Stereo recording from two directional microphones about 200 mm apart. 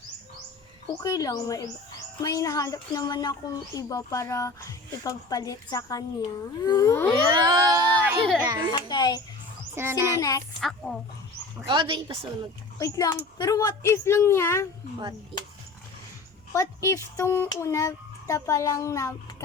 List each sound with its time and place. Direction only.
1.0 s speech: 15° left (ahead or behind)
7.3 s a sound: 20° right (ahead or behind)
8.4 s a woman's voice: 20° right (ahead or behind)
8.7 s a child's voice: 20° left (ahead or behind)
9.7 s a child's voice: 15° right (ahead or behind)
10.2 s speech: 15° left (ahead or behind)
10.6 s a woman's voice: centre (ahead or behind)
11.7 s a woman's voice: 25° right (ahead or behind)
12.8 s speech: 15° left (ahead or behind)
16.5 s speech: 15° left (ahead or behind)